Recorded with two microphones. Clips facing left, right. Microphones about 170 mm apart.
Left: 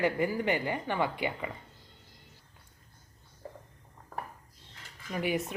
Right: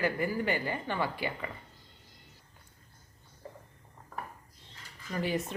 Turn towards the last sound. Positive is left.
turn(degrees=15)  # may be behind; listen again after turning